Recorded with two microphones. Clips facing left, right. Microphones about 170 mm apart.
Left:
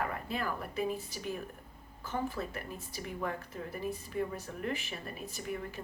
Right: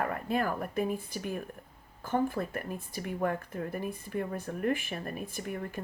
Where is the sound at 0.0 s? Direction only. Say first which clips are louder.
Right 5 dB; 50° right (ahead or behind).